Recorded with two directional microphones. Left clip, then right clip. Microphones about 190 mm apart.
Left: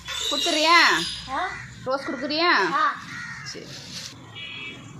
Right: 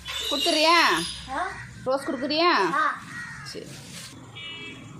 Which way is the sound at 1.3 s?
5° right (ahead or behind).